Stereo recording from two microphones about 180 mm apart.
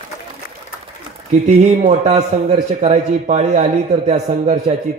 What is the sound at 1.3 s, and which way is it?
A man's voice, 40° right (ahead or behind).